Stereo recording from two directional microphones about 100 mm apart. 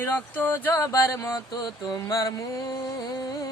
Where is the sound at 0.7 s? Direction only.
35° left (ahead or behind).